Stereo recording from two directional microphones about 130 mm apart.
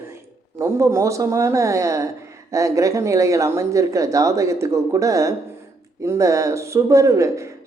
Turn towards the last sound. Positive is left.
turn(degrees=-25)  # may be behind; listen again after turning